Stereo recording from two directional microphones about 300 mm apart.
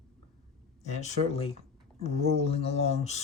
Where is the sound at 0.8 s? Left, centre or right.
Left.